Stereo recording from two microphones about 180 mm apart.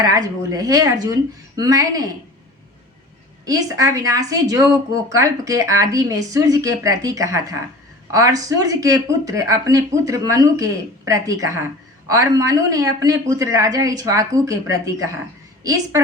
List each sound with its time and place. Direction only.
0.0 s speech: 20° right (ahead or behind)
3.4 s speech: 20° right (ahead or behind)